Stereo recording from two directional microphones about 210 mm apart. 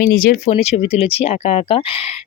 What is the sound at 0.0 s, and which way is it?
Speech, 45° left (ahead or behind).